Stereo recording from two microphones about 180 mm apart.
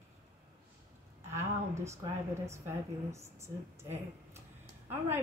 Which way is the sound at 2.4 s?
15° right (ahead or behind).